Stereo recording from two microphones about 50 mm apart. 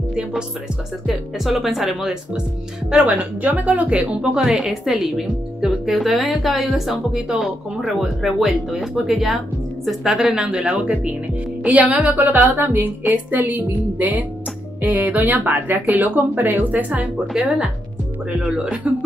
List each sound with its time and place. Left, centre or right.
1.0 s speech: centre
3.0 s speech: right
4.4 s speech: centre
10.1 s speech: centre; by 17.1 s right
17.3 s speech: centre